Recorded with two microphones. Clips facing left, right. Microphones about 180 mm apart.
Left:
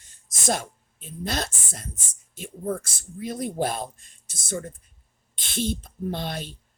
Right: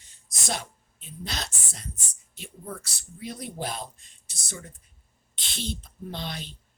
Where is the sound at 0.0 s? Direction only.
50° left (ahead or behind).